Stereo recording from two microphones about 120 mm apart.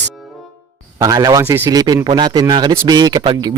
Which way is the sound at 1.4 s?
20° right (ahead or behind).